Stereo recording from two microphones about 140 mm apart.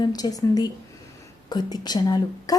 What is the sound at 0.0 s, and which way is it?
A woman's voice, 25° left (ahead or behind).